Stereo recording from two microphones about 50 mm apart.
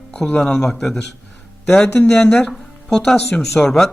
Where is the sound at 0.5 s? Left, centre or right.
Centre.